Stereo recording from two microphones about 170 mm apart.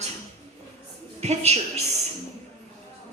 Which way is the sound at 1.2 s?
40° right (ahead or behind).